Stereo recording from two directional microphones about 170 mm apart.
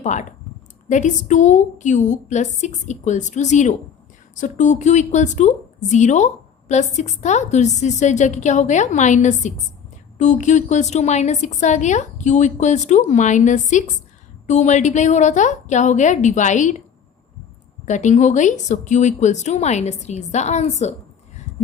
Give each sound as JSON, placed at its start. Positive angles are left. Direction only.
{"t": 0.0, "sound": "a woman's voice", "side_deg": 45}
{"t": 17.8, "sound": "a woman's voice", "side_deg": 45}